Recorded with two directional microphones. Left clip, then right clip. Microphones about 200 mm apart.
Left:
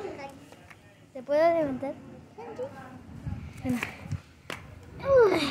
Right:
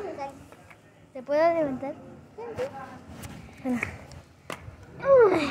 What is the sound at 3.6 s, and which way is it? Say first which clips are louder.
Speech: right 2 dB; centre (ahead or behind).